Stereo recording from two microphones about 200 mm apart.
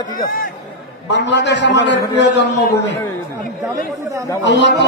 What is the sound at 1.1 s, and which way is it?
A man's voice, 60° left (ahead or behind).